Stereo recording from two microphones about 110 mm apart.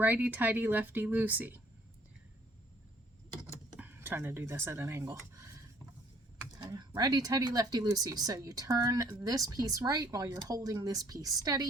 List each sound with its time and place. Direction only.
0.0 s speech: 15° right (ahead or behind)
3.8 s speech: 20° right (ahead or behind)
6.6 s speech: 40° right (ahead or behind)